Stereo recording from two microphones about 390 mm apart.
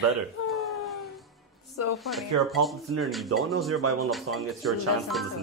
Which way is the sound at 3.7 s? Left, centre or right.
Right.